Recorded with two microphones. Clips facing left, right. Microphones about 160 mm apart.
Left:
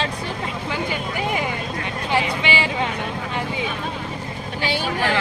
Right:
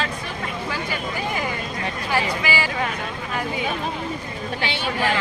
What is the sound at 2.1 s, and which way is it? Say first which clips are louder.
Speech: left 2 dB; 25° left (ahead or behind).